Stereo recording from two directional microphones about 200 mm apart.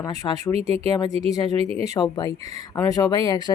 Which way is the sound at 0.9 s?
20° left (ahead or behind).